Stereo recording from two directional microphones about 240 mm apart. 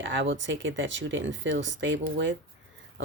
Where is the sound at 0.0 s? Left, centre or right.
Right.